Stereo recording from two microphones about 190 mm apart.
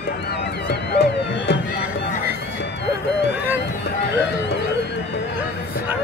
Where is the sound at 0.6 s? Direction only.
65° left (ahead or behind).